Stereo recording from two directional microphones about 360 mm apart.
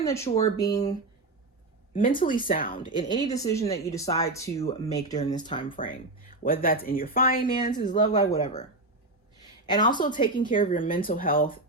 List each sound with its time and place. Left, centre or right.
0.0 s speech: centre
1.9 s speech: left
7.9 s speech: centre